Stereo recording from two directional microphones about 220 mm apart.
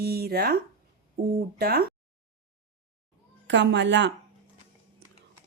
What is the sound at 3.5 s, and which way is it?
Speech, 55° right (ahead or behind).